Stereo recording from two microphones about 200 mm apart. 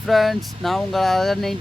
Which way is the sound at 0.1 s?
Centre (ahead or behind).